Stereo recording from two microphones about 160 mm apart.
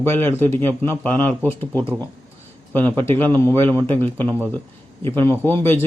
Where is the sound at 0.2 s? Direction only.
15° left (ahead or behind).